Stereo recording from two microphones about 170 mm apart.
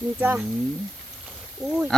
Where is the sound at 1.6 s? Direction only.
5° right (ahead or behind).